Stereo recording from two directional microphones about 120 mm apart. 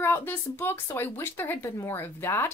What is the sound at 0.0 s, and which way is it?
Speech, 15° left (ahead or behind).